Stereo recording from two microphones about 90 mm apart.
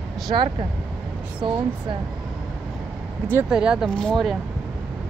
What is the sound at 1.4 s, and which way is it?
Speech, 75° right (ahead or behind).